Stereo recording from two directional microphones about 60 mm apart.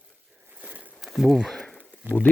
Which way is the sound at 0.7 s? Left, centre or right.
Right.